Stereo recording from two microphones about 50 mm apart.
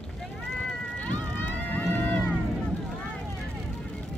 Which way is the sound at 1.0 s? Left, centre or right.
Left.